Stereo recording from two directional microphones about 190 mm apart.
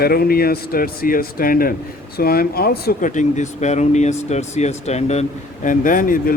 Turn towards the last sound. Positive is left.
turn(degrees=45)  # may be behind; listen again after turning